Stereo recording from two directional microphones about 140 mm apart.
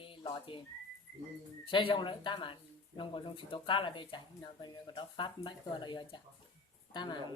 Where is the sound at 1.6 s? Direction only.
40° left (ahead or behind).